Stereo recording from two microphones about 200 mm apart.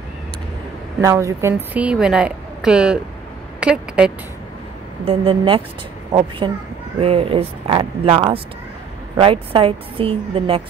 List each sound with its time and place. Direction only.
1.0 s a woman's voice: 15° right (ahead or behind)
5.0 s a woman's voice: 25° right (ahead or behind)
7.0 s a woman's voice: 30° right (ahead or behind)